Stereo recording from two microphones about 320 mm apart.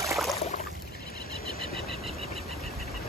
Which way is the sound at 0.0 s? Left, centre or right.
Centre.